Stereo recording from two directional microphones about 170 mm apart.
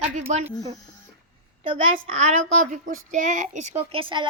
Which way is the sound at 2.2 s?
45° right (ahead or behind).